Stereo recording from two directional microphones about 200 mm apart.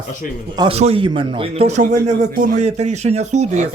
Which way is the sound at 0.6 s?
30° right (ahead or behind).